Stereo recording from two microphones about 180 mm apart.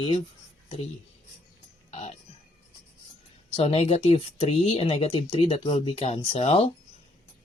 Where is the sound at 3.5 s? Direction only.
35° left (ahead or behind).